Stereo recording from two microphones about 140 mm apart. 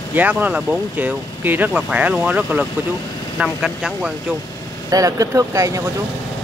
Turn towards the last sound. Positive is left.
turn(degrees=-25)  # may be behind; listen again after turning